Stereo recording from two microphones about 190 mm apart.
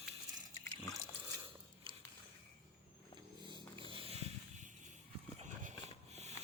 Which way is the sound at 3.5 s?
25° right (ahead or behind).